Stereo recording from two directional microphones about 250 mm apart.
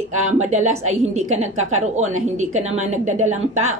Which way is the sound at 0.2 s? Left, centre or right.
Right.